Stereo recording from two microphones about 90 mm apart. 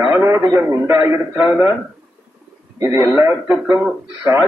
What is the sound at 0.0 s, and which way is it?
A man's voice, 35° right (ahead or behind).